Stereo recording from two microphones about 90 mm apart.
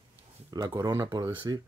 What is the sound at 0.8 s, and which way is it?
Speech, 35° right (ahead or behind).